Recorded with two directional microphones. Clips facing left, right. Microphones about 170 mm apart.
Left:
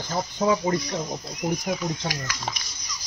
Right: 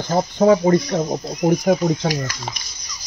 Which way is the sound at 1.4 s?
70° right (ahead or behind).